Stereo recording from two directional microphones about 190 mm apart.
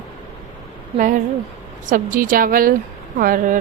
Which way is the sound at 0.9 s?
45° right (ahead or behind).